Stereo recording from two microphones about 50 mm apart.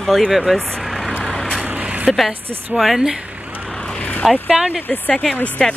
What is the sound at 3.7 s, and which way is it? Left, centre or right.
Vehicle, centre.